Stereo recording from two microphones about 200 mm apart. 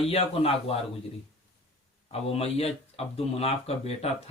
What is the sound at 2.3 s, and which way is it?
Speech, 30° left (ahead or behind).